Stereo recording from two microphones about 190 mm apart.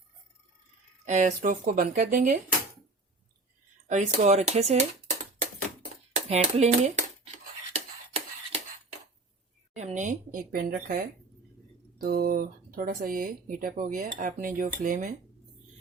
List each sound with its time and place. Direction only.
1.0 s speech: 40° right (ahead or behind)
3.8 s speech: 40° right (ahead or behind)
6.1 s a sound: 35° right (ahead or behind)
9.7 s speech: 40° right (ahead or behind)